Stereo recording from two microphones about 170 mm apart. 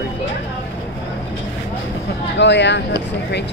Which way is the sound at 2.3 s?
90° left.